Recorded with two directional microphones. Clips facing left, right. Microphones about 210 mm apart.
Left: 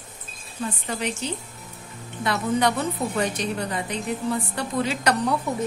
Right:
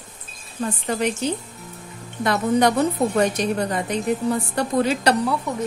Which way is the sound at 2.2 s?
45° right (ahead or behind).